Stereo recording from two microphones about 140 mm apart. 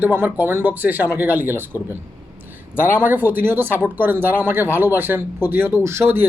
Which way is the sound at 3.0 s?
15° right (ahead or behind).